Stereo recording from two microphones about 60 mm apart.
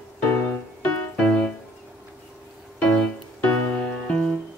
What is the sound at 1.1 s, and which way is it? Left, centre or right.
Music, centre.